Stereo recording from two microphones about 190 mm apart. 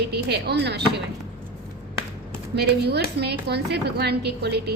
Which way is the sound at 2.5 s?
60° right (ahead or behind).